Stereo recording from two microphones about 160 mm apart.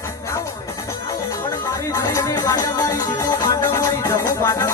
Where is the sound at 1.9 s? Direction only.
20° left (ahead or behind).